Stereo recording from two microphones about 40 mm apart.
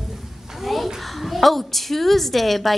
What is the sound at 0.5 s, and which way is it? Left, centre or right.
A woman's voice, centre.